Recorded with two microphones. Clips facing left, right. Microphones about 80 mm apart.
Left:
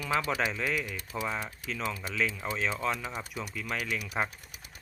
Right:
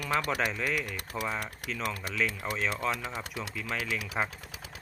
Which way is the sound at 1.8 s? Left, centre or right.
Right.